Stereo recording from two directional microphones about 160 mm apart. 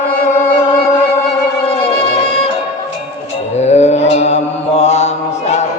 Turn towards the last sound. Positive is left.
turn(degrees=45)  # may be behind; listen again after turning